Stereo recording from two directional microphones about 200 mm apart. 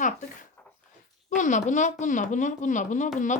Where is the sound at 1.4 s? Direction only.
40° left (ahead or behind).